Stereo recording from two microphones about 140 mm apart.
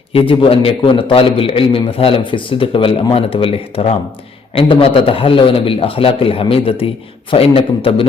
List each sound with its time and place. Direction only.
0.1 s a man's voice: 40° left (ahead or behind)